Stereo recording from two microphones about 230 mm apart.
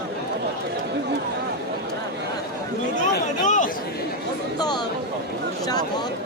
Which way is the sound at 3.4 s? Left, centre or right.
Left.